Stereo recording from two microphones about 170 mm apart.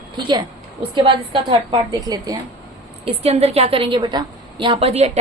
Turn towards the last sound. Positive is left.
turn(degrees=-40)  # may be behind; listen again after turning